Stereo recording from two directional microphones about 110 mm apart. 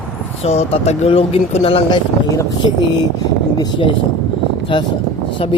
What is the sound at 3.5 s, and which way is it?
Speech, 40° left (ahead or behind).